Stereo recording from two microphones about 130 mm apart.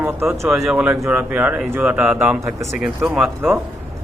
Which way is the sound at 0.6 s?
10° right (ahead or behind).